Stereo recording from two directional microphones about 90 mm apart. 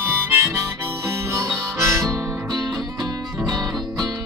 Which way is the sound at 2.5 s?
45° right (ahead or behind).